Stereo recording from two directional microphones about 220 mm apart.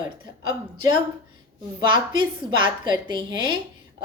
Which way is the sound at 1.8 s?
20° right (ahead or behind).